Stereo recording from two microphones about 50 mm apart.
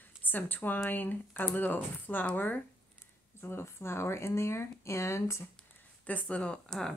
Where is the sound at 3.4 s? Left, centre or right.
Left.